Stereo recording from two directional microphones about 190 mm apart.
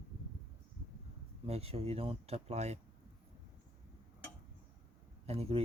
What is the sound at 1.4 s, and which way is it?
Speech, 30° right (ahead or behind).